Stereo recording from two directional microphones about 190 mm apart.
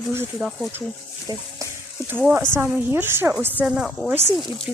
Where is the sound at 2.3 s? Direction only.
10° right (ahead or behind).